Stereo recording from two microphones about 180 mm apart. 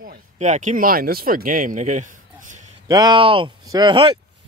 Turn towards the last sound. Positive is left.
turn(degrees=-25)  # may be behind; listen again after turning